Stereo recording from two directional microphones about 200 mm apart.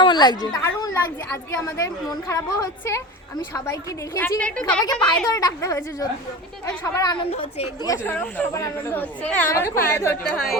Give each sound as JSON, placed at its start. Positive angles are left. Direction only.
{"t": 0.0, "sound": "a woman's voice", "side_deg": 20}
{"t": 4.8, "sound": "a woman's voice", "side_deg": 20}
{"t": 8.0, "sound": "a woman's voice", "side_deg": 5}
{"t": 10.3, "sound": "a woman's voice", "side_deg": 0}